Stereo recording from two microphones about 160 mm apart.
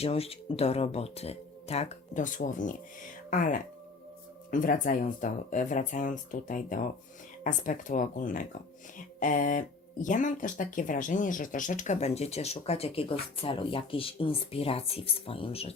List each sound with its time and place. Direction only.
0.0 s speech: 40° left (ahead or behind)